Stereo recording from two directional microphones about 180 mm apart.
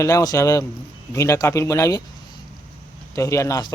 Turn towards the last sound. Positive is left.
turn(degrees=15)  # may be behind; listen again after turning